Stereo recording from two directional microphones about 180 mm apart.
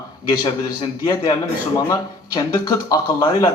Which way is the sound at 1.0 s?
25° left (ahead or behind).